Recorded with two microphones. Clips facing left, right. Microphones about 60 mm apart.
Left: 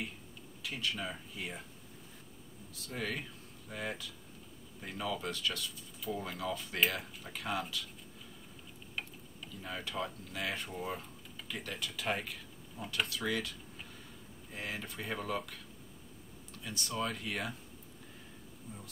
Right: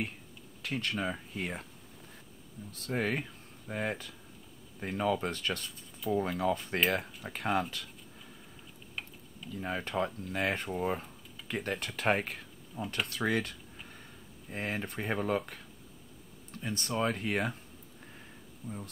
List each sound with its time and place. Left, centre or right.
0.6 s speech: right
2.7 s speech: right
9.5 s speech: right
16.6 s speech: right